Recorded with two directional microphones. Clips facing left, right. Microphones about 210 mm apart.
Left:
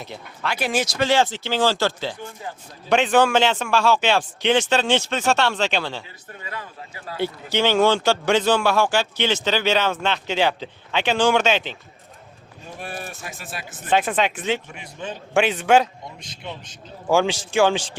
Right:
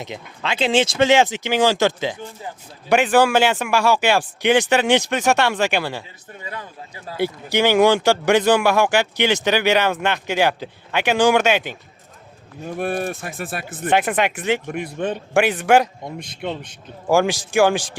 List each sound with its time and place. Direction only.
0.0 s speech: 20° right (ahead or behind)
7.2 s speech: 10° right (ahead or behind)
12.6 s speech: 60° right (ahead or behind)
13.9 s speech: 10° right (ahead or behind)
14.7 s speech: 55° right (ahead or behind)
15.4 s speech: 10° right (ahead or behind)
16.1 s speech: 55° right (ahead or behind)
17.1 s speech: 10° right (ahead or behind)